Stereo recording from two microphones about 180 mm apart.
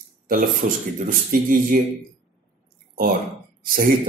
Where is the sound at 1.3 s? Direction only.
50° right (ahead or behind).